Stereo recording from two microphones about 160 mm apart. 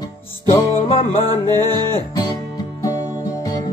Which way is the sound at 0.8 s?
35° left (ahead or behind).